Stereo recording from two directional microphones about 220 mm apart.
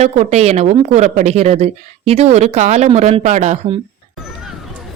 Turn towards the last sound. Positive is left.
turn(degrees=-30)  # may be behind; listen again after turning